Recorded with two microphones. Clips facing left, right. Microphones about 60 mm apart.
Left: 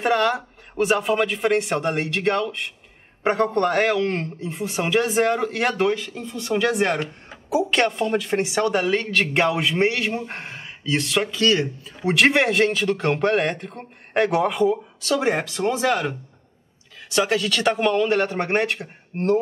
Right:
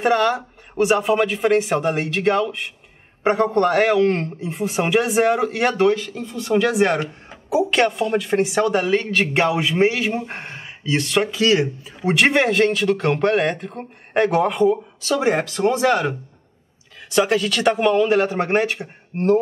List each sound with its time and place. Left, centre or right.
0.0 s a man's voice: centre